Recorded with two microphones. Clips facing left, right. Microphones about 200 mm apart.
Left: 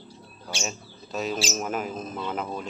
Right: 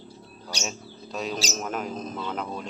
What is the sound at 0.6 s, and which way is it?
Speech, centre (ahead or behind).